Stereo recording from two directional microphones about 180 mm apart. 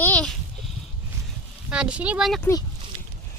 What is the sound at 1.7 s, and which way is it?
Speech, 5° right (ahead or behind).